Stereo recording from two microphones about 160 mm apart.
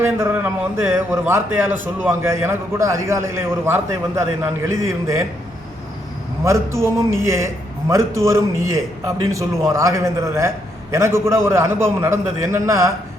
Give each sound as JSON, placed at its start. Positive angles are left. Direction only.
{"t": 0.0, "sound": "a man's voice", "side_deg": -15}
{"t": 6.4, "sound": "a man's voice", "side_deg": -20}